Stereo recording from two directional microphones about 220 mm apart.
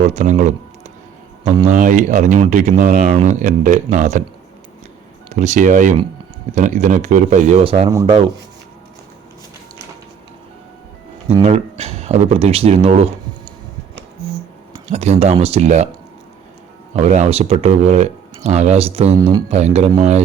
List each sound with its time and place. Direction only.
0.0 s speech: 35° right (ahead or behind)
1.6 s speech: 35° right (ahead or behind)
5.3 s speech: 30° right (ahead or behind)
11.3 s speech: 25° right (ahead or behind)
14.8 s speech: 30° right (ahead or behind)
16.9 s speech: 30° right (ahead or behind)